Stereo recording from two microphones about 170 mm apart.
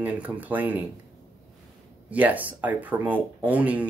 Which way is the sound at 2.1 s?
10° right (ahead or behind).